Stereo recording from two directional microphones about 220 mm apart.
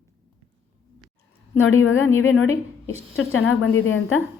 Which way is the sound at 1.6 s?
65° left (ahead or behind).